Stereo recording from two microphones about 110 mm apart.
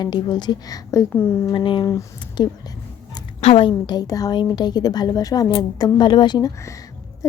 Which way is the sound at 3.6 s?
40° left (ahead or behind).